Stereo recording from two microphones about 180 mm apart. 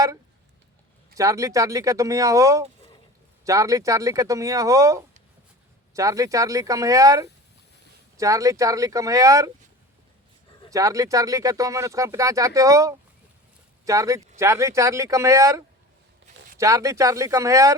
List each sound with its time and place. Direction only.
1.1 s speech: 20° right (ahead or behind)
10.7 s speech: 20° right (ahead or behind)